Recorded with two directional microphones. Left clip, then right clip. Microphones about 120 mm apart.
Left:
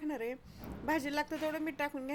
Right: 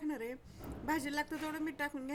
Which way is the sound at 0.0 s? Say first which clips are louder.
Left 2 dB; 25° left (ahead or behind).